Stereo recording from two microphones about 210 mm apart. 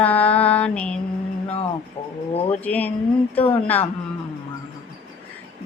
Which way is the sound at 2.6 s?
5° left (ahead or behind).